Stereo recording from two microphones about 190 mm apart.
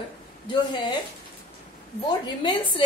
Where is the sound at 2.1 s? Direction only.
25° left (ahead or behind).